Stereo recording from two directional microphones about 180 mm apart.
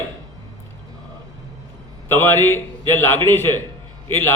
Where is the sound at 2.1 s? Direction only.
10° left (ahead or behind).